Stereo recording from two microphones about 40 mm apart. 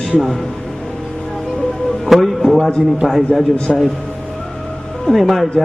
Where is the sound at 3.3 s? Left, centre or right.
Left.